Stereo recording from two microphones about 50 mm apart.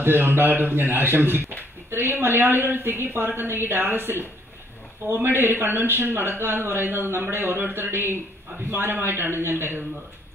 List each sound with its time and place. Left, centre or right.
0.0 s a man's voice: right